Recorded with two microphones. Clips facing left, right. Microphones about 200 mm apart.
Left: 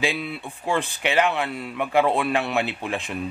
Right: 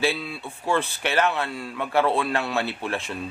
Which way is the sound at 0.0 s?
20° left (ahead or behind).